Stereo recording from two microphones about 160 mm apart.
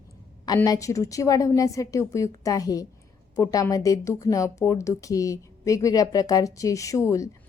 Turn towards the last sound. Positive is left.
turn(degrees=20)  # may be behind; listen again after turning